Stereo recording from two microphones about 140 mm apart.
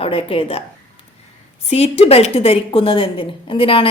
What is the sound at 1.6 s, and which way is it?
A woman's voice, 50° left (ahead or behind).